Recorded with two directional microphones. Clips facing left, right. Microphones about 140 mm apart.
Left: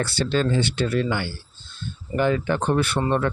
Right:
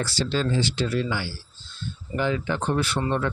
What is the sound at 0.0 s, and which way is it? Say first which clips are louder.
Speech: left 3 dB; 60° left (ahead or behind).